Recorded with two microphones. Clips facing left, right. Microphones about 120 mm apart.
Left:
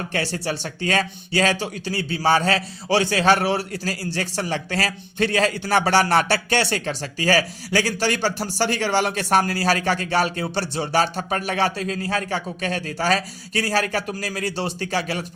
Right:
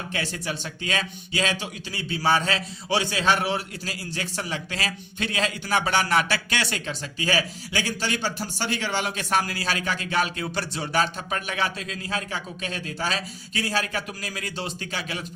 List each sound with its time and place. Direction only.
0.1 s speech: 35° left (ahead or behind)